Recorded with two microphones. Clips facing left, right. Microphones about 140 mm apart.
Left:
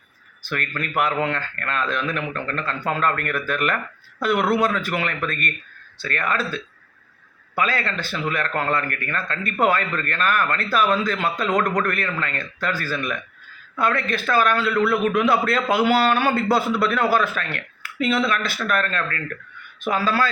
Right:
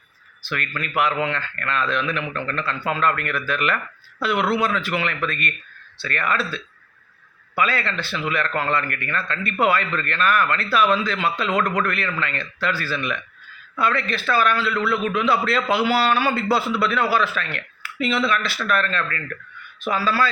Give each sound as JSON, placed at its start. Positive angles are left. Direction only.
{"t": 0.4, "sound": "speech", "side_deg": 45}